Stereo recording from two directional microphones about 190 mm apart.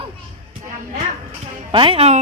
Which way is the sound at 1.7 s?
30° right (ahead or behind).